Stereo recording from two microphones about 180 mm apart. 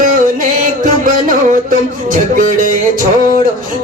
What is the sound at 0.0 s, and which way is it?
Music, 50° right (ahead or behind).